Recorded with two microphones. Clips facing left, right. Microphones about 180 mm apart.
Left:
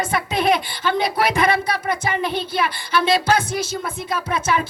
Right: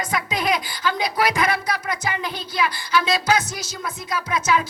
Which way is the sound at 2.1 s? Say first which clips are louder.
Left 6 dB; 25° left (ahead or behind).